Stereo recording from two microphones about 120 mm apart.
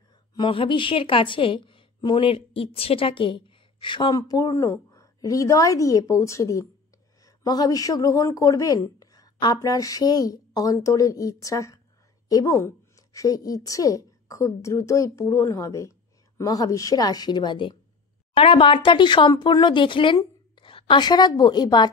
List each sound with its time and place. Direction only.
0.3 s a woman's voice: 45° left (ahead or behind)
4.2 s a woman's voice: 30° left (ahead or behind)